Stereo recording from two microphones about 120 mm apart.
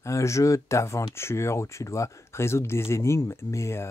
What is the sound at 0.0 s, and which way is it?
Speech, 25° left (ahead or behind).